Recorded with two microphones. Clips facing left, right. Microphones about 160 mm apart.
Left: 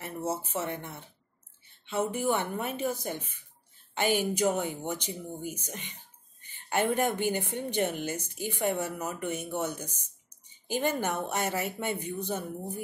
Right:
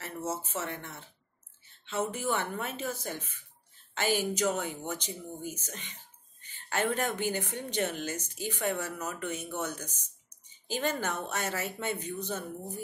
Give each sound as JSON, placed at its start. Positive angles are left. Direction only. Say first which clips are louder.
{"t": 0.0, "sound": "a woman's voice", "louder": "left 3 dB", "side_deg": 10}
{"t": 4.4, "sound": "a woman's voice", "louder": "left 3 dB", "side_deg": 15}